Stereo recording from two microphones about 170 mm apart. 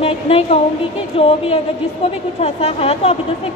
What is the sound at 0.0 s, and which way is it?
A woman's voice, 35° left (ahead or behind).